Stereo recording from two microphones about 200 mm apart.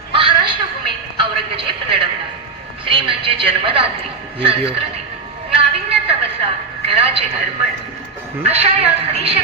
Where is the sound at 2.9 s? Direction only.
25° right (ahead or behind).